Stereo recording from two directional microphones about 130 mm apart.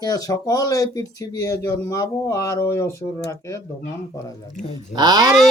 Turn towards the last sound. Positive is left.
turn(degrees=-30)  # may be behind; listen again after turning